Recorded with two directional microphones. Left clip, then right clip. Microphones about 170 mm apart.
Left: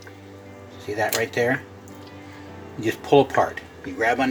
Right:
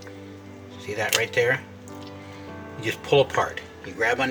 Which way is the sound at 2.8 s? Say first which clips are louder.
Left 3 dB; 35° left (ahead or behind).